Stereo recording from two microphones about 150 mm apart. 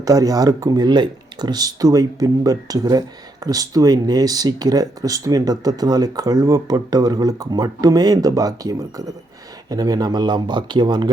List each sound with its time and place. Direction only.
0.0 s speech: 25° right (ahead or behind)